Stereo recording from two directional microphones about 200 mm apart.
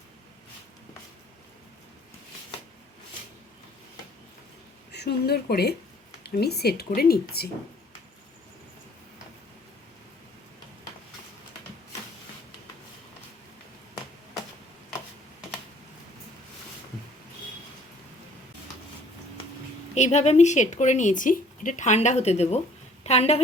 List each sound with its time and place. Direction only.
4.9 s a woman's voice: 55° left (ahead or behind)
19.9 s speech: 35° left (ahead or behind)